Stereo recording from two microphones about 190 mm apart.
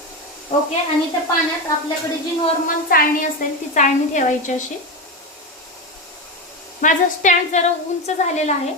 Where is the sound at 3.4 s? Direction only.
45° left (ahead or behind).